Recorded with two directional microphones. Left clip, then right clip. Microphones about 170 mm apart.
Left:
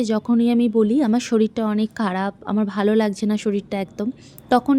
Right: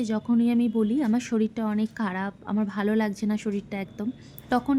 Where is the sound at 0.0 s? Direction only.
30° left (ahead or behind).